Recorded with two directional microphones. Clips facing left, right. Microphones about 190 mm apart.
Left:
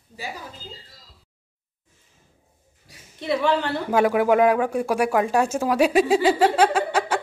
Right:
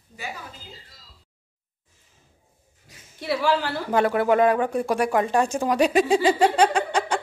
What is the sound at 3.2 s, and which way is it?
Speech, 5° right (ahead or behind).